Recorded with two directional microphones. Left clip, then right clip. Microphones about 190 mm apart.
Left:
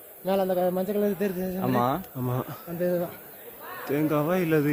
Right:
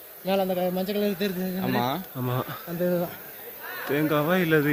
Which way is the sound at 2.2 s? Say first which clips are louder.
Right 2 dB; centre (ahead or behind).